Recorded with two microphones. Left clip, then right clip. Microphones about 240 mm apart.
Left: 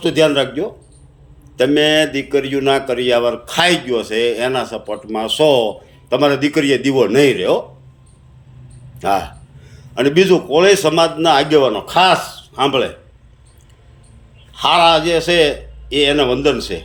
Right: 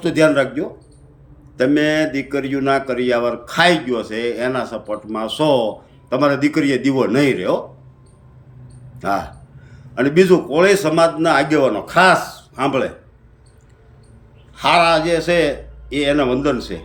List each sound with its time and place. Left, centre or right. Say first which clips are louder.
0.0 s a man's voice: left 1 dB; centre
9.0 s a man's voice: left 4 dB; centre
14.5 s a man's voice: left 2 dB; centre